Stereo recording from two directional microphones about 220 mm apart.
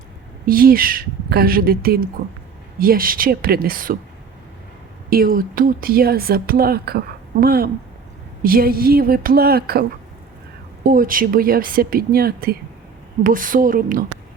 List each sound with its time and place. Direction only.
0.4 s a woman's voice: 40° right (ahead or behind)
5.0 s speech: 40° right (ahead or behind)
10.8 s a woman's voice: 40° right (ahead or behind)